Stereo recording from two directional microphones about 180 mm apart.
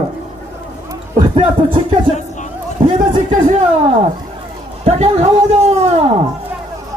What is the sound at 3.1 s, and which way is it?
Speech, 45° right (ahead or behind).